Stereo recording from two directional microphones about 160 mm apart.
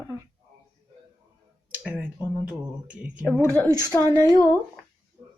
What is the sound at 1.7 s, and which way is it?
Speech, 10° right (ahead or behind).